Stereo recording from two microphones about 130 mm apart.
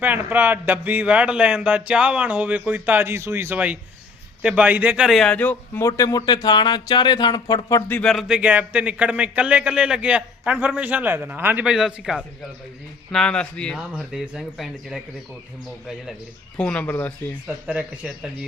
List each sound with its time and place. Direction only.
0.0 s speech: 15° right (ahead or behind)
5.0 s speech: centre (ahead or behind)
5.8 s speech: 25° left (ahead or behind)
7.9 s speech: 10° left (ahead or behind)
8.1 s speech: 10° right (ahead or behind)
13.9 s speech: 5° right (ahead or behind)
16.6 s speech: 10° left (ahead or behind)
17.7 s speech: 5° right (ahead or behind)